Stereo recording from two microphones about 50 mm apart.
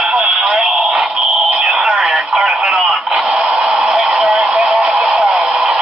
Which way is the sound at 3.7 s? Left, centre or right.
Centre.